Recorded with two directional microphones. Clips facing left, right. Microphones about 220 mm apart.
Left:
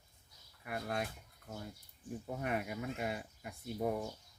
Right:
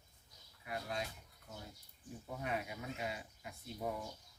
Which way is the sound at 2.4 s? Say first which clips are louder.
Left 3 dB; 55° left (ahead or behind).